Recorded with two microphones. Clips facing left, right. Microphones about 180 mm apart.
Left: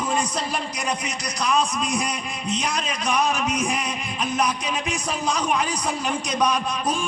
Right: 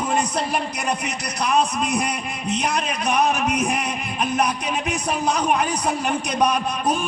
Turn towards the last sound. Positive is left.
turn(degrees=-60)  # may be behind; listen again after turning